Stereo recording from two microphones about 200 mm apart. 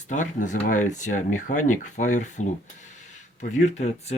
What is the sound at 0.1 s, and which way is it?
Speech, 40° left (ahead or behind).